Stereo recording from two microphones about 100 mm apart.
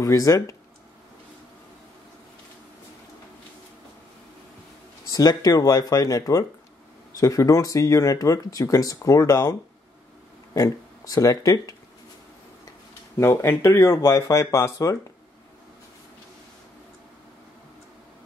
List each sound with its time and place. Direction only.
0.0 s speech: 35° left (ahead or behind)
5.1 s speech: 40° left (ahead or behind)
13.2 s speech: 25° left (ahead or behind)